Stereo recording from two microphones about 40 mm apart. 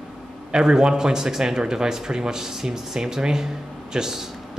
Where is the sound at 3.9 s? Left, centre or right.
Centre.